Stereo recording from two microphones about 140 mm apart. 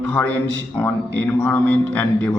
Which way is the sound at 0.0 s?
10° left (ahead or behind).